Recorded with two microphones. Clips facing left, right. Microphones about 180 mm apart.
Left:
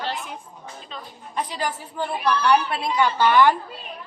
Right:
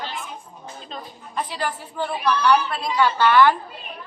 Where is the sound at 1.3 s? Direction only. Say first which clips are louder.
Even; 10° left (ahead or behind).